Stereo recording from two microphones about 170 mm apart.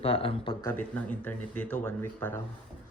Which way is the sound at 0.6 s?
10° left (ahead or behind).